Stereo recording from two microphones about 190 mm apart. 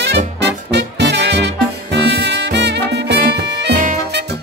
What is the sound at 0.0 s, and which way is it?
Music, 65° right (ahead or behind).